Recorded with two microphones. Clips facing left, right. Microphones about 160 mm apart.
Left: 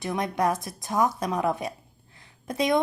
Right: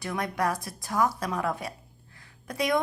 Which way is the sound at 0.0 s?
20° left (ahead or behind).